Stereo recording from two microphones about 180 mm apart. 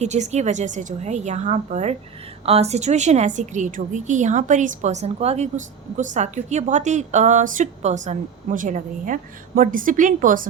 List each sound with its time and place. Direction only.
0.0 s a woman's voice: 40° right (ahead or behind)